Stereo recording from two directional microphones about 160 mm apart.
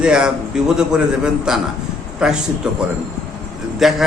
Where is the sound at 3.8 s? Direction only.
Centre (ahead or behind).